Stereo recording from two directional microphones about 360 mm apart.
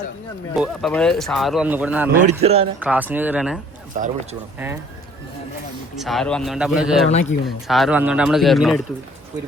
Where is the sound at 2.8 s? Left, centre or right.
Centre.